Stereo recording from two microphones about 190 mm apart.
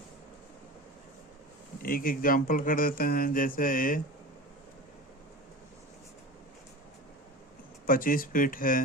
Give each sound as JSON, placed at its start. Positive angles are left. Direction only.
{"t": 1.8, "sound": "speech", "side_deg": 50}
{"t": 7.9, "sound": "speech", "side_deg": 50}